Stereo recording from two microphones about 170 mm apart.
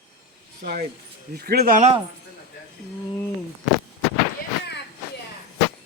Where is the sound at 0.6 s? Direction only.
65° right (ahead or behind).